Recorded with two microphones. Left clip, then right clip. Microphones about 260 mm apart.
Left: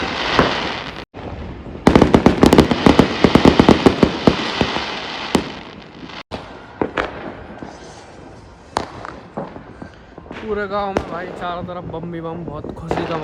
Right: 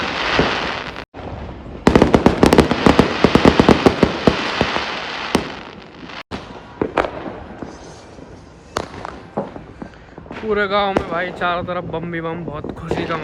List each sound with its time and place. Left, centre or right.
0.1 s fireworks: centre
6.8 s a sound: left
8.8 s fireworks: left
10.3 s basketball bounce: centre
10.6 s speech: centre